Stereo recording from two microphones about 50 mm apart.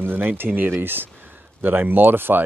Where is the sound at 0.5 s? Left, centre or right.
Right.